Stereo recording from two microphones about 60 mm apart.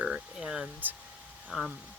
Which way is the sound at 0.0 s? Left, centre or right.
Centre.